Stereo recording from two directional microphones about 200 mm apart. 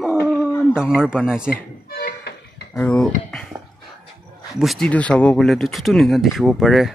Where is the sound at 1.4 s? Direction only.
50° left (ahead or behind).